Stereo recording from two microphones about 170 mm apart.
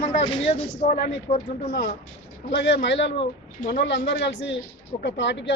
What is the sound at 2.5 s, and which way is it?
Speech, 90° left.